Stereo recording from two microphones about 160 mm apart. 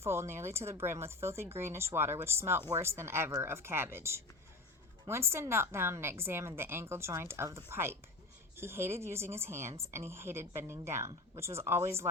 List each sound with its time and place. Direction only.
0.0 s speech: 15° right (ahead or behind)